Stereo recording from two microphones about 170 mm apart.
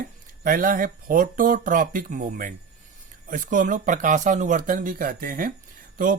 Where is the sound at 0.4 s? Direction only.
55° right (ahead or behind).